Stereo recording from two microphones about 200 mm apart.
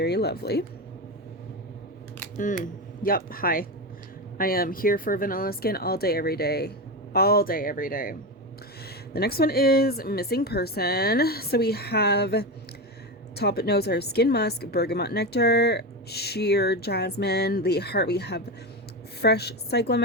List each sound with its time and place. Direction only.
0.0 s a woman's voice: 55° left (ahead or behind)
2.6 s a woman's voice: 45° left (ahead or behind)
9.1 s a woman's voice: 50° left (ahead or behind)